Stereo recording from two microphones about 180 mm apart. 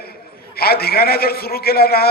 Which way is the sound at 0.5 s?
60° left (ahead or behind).